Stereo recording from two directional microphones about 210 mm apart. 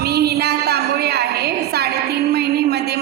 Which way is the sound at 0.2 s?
50° right (ahead or behind).